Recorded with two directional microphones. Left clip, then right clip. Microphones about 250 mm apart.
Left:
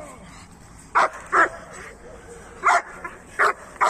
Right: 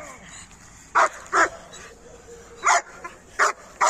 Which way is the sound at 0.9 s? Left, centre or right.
Right.